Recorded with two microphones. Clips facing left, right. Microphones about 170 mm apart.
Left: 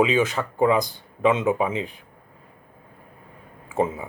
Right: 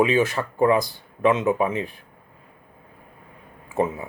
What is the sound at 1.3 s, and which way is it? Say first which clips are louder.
Speech: right 1 dB; 20° left (ahead or behind).